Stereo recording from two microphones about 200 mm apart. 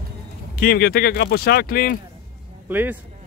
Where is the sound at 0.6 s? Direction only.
50° left (ahead or behind).